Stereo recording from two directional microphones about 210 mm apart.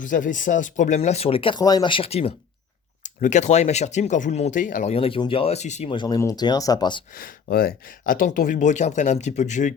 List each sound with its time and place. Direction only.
0.0 s speech: 40° left (ahead or behind); by 7.0 s 20° left (ahead or behind)
7.1 s speech: 45° left (ahead or behind)